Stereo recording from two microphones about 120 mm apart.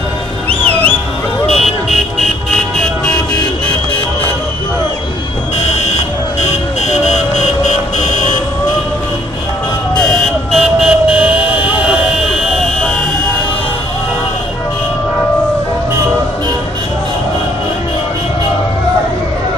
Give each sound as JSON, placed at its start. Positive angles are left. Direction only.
{"t": 0.5, "sound": "music", "side_deg": 10}
{"t": 1.4, "sound": "vehicle", "side_deg": 0}
{"t": 6.4, "sound": "vehicle", "side_deg": 70}
{"t": 10.5, "sound": "vehicle", "side_deg": 0}